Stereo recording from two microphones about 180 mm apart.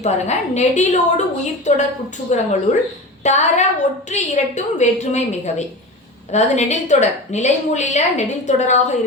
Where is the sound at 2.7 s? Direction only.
40° left (ahead or behind).